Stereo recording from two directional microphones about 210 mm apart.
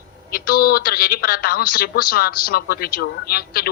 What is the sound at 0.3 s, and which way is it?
Speech, 45° left (ahead or behind).